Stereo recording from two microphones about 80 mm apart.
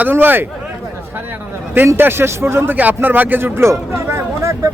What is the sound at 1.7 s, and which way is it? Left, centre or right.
A man's voice, right.